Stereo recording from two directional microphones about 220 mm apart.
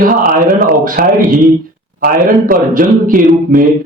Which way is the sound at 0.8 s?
40° right (ahead or behind).